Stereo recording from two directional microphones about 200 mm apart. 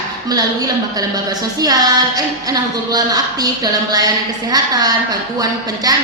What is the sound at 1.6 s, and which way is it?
A woman's voice, 20° right (ahead or behind).